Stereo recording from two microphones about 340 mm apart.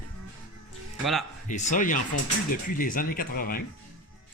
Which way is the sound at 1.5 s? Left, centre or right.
Left.